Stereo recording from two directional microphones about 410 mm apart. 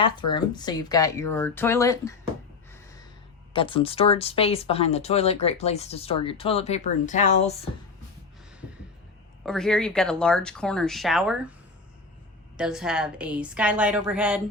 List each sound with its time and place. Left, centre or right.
0.0 s speech: centre
3.5 s speech: centre
9.5 s speech: centre
12.5 s speech: centre